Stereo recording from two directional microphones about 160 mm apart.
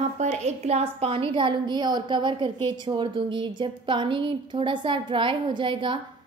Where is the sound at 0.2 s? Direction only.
45° right (ahead or behind).